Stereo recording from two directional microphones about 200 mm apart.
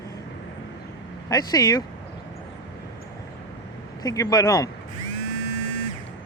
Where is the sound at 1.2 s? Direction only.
20° left (ahead or behind).